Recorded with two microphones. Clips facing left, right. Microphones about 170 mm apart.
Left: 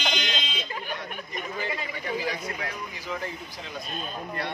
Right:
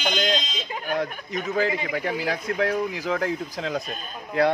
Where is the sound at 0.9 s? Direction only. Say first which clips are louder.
Right 8 dB; 90° right.